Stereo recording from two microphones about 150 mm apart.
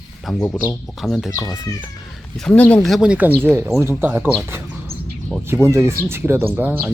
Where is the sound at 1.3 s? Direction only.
20° left (ahead or behind).